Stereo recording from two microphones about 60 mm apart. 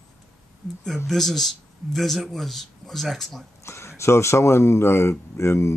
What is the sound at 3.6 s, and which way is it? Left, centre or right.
Speech, left.